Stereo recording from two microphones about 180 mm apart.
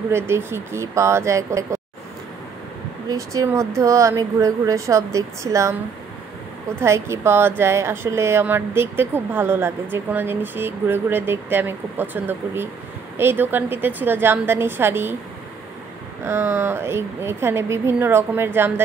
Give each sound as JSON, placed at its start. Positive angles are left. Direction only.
{"t": 0.1, "sound": "a woman's voice", "side_deg": -15}
{"t": 3.1, "sound": "a woman's voice", "side_deg": -20}
{"t": 16.3, "sound": "a woman's voice", "side_deg": -15}